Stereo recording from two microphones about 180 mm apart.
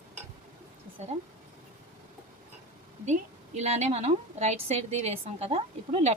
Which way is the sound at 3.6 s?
40° right (ahead or behind).